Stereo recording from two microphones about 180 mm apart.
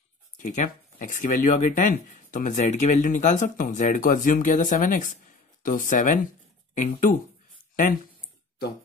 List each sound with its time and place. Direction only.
0.4 s speech: 45° left (ahead or behind)